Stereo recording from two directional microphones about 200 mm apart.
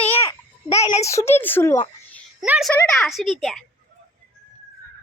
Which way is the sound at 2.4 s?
10° right (ahead or behind).